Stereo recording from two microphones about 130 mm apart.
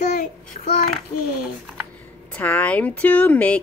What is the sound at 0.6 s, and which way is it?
Child singing, 60° left (ahead or behind).